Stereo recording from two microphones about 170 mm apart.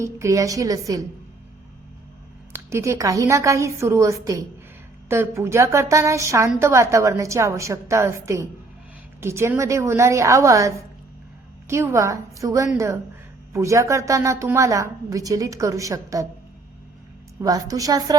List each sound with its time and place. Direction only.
0.0 s a woman's voice: 15° right (ahead or behind)
2.5 s a woman's voice: 15° right (ahead or behind)
17.4 s a woman's voice: 20° right (ahead or behind)